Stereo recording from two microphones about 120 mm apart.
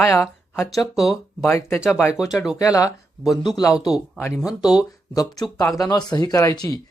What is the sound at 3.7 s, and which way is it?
Speech, 5° right (ahead or behind).